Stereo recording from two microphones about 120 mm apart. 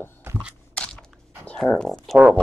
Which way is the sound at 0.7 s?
5° left (ahead or behind).